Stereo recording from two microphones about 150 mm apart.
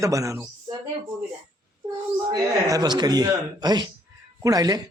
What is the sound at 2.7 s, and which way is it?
A man's voice, 25° right (ahead or behind).